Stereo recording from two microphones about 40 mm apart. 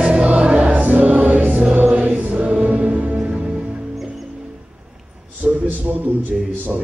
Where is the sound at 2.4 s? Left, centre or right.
Right.